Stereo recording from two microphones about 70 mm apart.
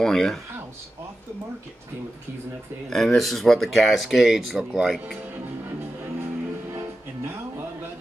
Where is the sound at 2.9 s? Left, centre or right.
Centre.